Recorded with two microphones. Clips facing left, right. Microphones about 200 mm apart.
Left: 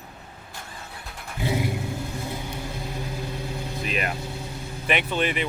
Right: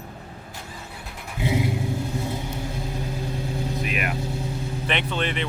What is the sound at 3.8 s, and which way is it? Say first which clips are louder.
Speech: left 4 dB; 30° left (ahead or behind).